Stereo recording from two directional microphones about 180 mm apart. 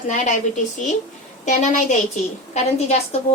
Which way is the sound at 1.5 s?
40° left (ahead or behind).